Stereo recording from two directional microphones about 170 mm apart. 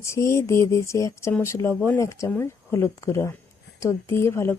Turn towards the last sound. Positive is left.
turn(degrees=15)  # may be behind; listen again after turning